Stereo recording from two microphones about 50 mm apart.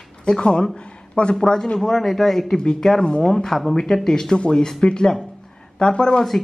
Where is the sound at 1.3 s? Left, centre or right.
Centre.